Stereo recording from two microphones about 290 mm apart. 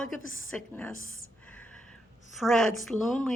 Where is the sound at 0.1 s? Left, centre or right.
Centre.